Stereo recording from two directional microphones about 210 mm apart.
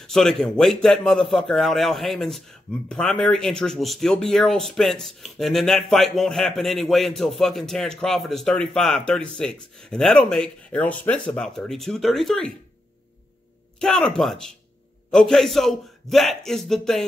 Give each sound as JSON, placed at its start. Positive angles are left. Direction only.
{"t": 0.0, "sound": "speech", "side_deg": 0}
{"t": 13.7, "sound": "speech", "side_deg": 5}